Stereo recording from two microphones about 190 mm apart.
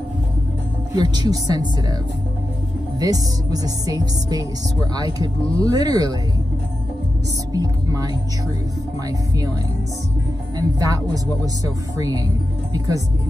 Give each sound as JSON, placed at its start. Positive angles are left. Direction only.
{"t": 0.9, "sound": "speech", "side_deg": -20}
{"t": 3.0, "sound": "speech", "side_deg": -20}
{"t": 7.5, "sound": "music", "side_deg": -20}
{"t": 10.8, "sound": "speech", "side_deg": -20}